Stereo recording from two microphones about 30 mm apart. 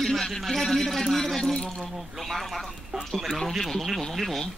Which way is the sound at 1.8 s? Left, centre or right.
Centre.